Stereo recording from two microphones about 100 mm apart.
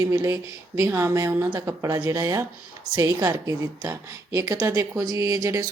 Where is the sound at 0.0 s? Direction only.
35° right (ahead or behind).